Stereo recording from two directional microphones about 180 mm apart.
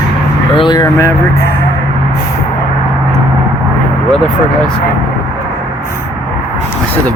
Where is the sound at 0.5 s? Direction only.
25° left (ahead or behind).